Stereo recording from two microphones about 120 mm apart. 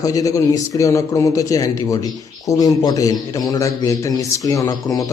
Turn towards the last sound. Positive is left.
turn(degrees=30)  # may be behind; listen again after turning